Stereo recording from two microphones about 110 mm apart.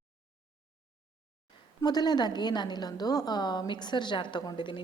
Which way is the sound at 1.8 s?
40° left (ahead or behind).